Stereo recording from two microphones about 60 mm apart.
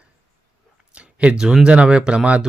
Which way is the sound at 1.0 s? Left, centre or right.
Centre.